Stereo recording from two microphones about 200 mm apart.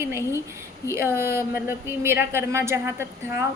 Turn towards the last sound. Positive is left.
turn(degrees=-15)  # may be behind; listen again after turning